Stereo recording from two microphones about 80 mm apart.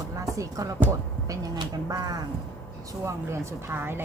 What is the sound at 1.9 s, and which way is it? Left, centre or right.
Speech, right.